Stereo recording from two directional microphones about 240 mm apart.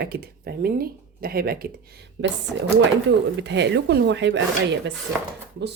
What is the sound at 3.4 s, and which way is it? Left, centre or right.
Speech, right.